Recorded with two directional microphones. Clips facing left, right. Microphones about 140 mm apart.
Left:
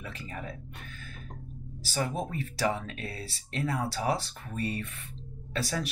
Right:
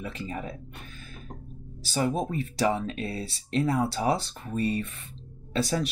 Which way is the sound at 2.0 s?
25° right (ahead or behind).